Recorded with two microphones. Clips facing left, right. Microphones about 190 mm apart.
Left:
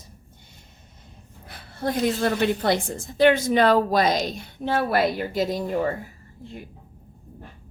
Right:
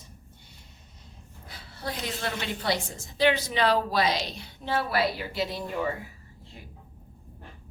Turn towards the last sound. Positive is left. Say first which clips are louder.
# left 6 dB
turn(degrees=40)  # may be behind; listen again after turning